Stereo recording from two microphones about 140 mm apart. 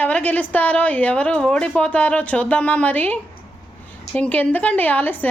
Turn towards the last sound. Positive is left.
turn(degrees=10)  # may be behind; listen again after turning